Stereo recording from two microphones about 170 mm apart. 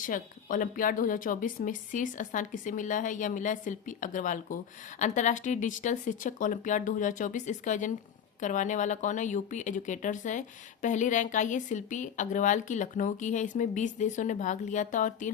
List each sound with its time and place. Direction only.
0.0 s a woman's voice: 50° left (ahead or behind)